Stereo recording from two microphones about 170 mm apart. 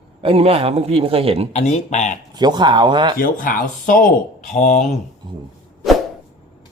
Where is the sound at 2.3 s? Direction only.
25° right (ahead or behind).